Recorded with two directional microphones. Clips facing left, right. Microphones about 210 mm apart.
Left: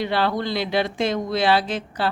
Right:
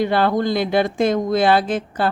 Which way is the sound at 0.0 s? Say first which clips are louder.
Right 5 dB; 50° right (ahead or behind).